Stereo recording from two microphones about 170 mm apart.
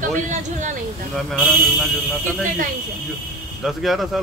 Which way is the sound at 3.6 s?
Centre (ahead or behind).